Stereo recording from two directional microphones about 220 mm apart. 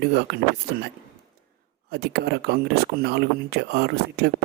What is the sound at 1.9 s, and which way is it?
Speech, 50° right (ahead or behind).